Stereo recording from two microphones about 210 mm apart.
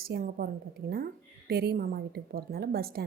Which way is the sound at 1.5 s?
50° right (ahead or behind).